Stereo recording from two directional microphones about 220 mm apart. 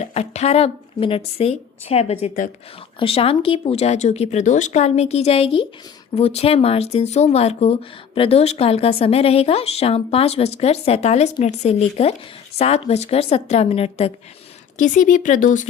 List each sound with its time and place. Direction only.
0.0 s speech: 30° left (ahead or behind)
3.0 s speech: 25° left (ahead or behind)